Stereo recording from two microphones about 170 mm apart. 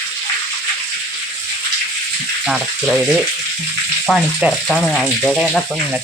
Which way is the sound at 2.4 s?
5° right (ahead or behind).